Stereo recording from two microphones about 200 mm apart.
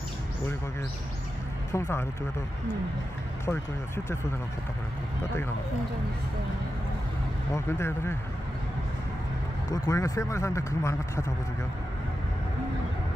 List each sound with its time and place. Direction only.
1.7 s speech: 10° left (ahead or behind)
3.4 s speech: 15° left (ahead or behind)
7.5 s speech: 15° left (ahead or behind)
9.7 s speech: 15° left (ahead or behind)